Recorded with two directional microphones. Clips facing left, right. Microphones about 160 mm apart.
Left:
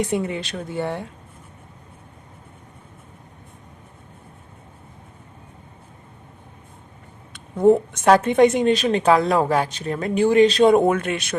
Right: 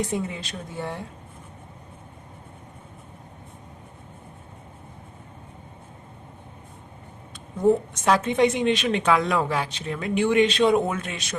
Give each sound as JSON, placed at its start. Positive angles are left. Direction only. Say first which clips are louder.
{"t": 0.1, "sound": "speech", "louder": "left 5 dB", "side_deg": 70}
{"t": 7.3, "sound": "a woman's voice", "louder": "left 5 dB", "side_deg": 65}